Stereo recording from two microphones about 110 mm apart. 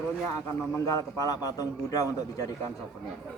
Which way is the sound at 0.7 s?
30° left (ahead or behind).